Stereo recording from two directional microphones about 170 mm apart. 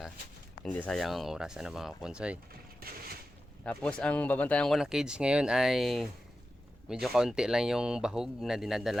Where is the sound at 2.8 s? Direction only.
65° right (ahead or behind).